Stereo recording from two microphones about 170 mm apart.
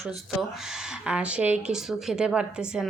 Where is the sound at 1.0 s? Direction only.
5° right (ahead or behind).